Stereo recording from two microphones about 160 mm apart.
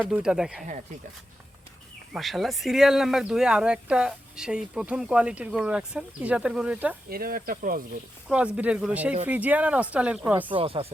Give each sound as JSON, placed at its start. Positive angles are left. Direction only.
{"t": 0.0, "sound": "speech", "side_deg": -5}
{"t": 2.1, "sound": "speech", "side_deg": 0}
{"t": 7.1, "sound": "speech", "side_deg": -65}
{"t": 8.3, "sound": "speech", "side_deg": -5}
{"t": 10.5, "sound": "speech", "side_deg": -35}